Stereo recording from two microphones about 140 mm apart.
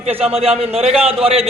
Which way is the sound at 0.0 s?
45° right (ahead or behind).